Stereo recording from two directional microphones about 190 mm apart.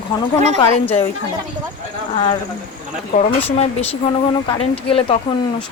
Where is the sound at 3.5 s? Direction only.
35° left (ahead or behind).